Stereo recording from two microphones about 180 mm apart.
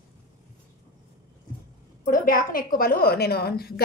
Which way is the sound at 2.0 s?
50° left (ahead or behind).